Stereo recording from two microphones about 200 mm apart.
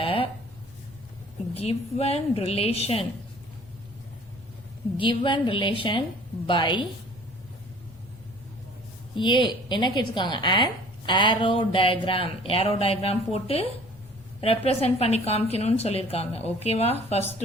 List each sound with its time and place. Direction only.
0.0 s a sound: 30° left (ahead or behind)
1.5 s a woman's voice: 30° left (ahead or behind)
4.9 s a woman's voice: 25° left (ahead or behind)
9.1 s a woman's voice: 25° left (ahead or behind)